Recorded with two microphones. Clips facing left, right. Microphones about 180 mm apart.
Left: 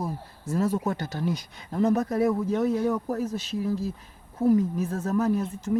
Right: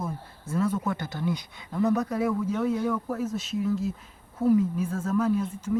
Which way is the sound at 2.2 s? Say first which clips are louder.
Left 2 dB; 40° left (ahead or behind).